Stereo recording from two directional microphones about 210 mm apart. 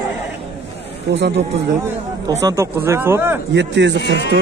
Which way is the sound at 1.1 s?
55° right (ahead or behind).